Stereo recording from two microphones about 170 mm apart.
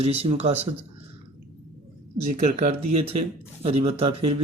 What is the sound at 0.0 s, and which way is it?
Speech, 35° right (ahead or behind).